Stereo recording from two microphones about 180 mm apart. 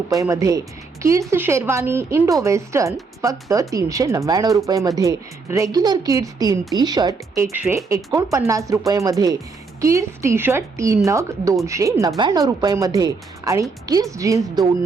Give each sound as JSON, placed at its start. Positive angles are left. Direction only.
{"t": 0.1, "sound": "speech", "side_deg": -20}